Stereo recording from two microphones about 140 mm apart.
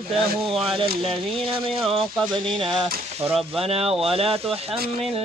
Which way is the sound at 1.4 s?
40° right (ahead or behind).